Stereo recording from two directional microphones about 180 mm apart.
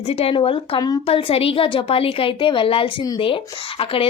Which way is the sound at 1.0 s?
30° left (ahead or behind).